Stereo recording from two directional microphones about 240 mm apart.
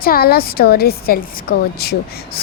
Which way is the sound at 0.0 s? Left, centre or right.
Left.